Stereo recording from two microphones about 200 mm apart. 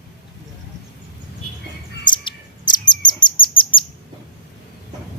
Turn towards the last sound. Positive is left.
turn(degrees=25)  # may be behind; listen again after turning